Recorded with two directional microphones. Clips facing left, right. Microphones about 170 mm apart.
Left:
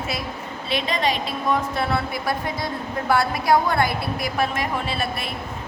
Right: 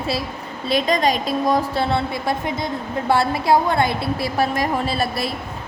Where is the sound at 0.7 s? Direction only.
40° right (ahead or behind); by 2.7 s 25° right (ahead or behind).